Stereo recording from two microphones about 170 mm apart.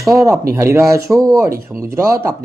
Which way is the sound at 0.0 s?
20° right (ahead or behind).